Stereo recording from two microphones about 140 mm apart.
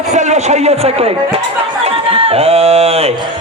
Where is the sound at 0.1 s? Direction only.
55° right (ahead or behind).